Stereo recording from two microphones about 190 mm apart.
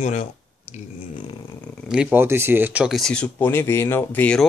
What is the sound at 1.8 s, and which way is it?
Speech, 5° right (ahead or behind).